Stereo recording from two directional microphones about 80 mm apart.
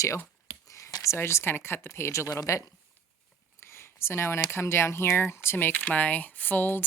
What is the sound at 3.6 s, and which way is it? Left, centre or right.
Speech, left.